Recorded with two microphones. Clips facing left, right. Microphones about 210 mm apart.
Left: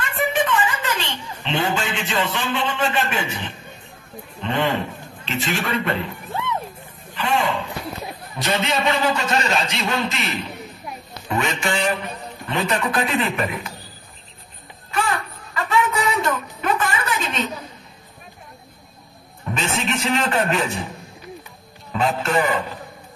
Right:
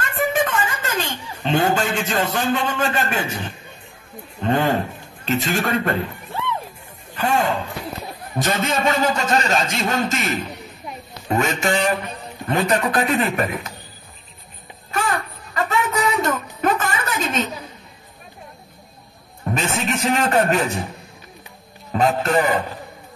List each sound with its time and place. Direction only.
0.0 s a sound: 45° right (ahead or behind)
4.4 s a man's voice: 40° right (ahead or behind)
7.2 s a man's voice: 45° right (ahead or behind)
14.9 s a sound: 45° right (ahead or behind)
19.5 s a man's voice: 45° right (ahead or behind)
21.9 s a man's voice: 40° right (ahead or behind)